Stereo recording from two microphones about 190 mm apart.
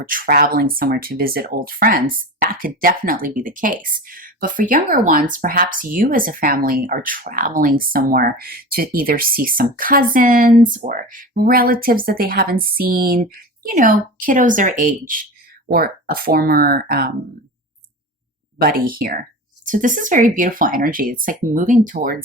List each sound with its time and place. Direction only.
0.0 s speech: 45° right (ahead or behind)
18.6 s speech: 50° right (ahead or behind)